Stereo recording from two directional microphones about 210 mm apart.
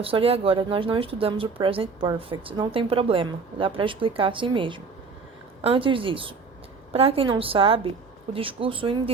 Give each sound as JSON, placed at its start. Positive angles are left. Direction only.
{"t": 0.0, "sound": "speech", "side_deg": -25}